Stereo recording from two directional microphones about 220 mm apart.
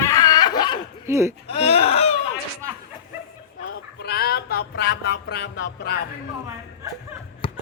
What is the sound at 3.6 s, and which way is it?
Fowl, 50° left (ahead or behind).